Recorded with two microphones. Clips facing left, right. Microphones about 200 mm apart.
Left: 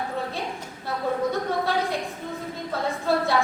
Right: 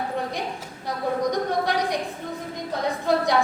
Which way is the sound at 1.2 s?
15° right (ahead or behind).